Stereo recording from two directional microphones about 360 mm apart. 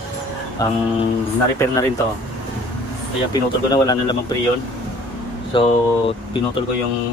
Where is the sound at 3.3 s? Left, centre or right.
Centre.